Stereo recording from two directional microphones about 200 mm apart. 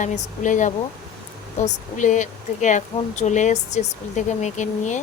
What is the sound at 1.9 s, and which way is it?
Speech, 40° left (ahead or behind).